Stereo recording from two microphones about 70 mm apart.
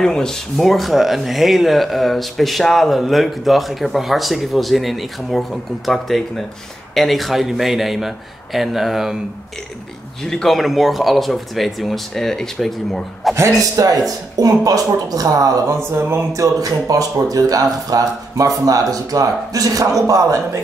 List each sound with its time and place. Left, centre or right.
0.0 s speech: centre
10.2 s speech: centre
13.6 s speech: right
15.9 s speech: right
16.5 s speech: right